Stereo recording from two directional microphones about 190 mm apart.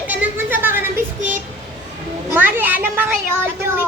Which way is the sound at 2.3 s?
10° right (ahead or behind).